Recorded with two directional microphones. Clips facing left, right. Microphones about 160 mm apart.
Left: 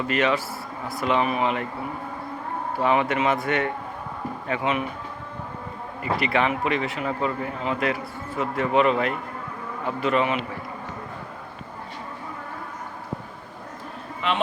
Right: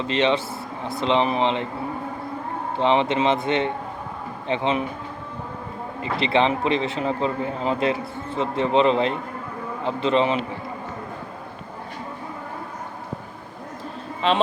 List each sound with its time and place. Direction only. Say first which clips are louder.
0.1 s speech: right 3 dB; 25° right (ahead or behind)
2.7 s speech: right 2 dB; 25° right (ahead or behind)
6.0 s speech: right 2 dB; 25° right (ahead or behind)
14.2 s speech: right 5 dB; 30° right (ahead or behind)